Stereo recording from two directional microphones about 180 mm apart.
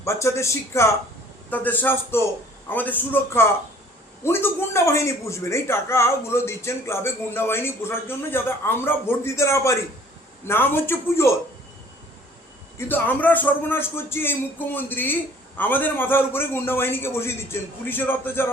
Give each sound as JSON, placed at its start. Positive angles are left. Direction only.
{"t": 0.0, "sound": "a man's voice", "side_deg": 15}
{"t": 12.9, "sound": "a man's voice", "side_deg": 10}